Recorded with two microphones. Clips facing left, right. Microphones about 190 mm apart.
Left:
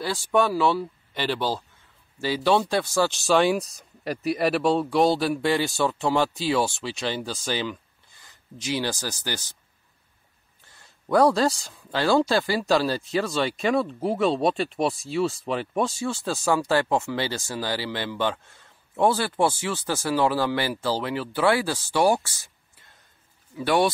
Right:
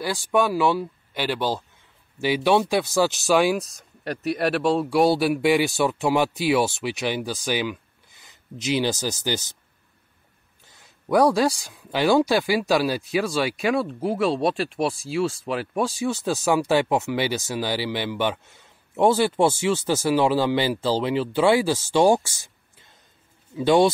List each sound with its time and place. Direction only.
0.0 s speech: 10° right (ahead or behind)
11.1 s speech: 15° right (ahead or behind)
16.0 s speech: 15° right (ahead or behind)
23.5 s speech: 20° right (ahead or behind)